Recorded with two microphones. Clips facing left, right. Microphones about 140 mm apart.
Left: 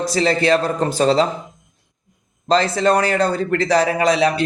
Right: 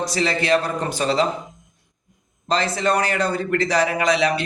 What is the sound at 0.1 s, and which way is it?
A man's voice, 35° left (ahead or behind).